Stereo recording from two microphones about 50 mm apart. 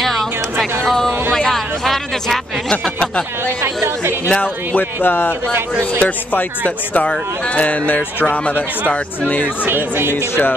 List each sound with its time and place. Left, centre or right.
0.0 s a sound: centre
3.6 s music: right
4.4 s speech: left
9.7 s speech: right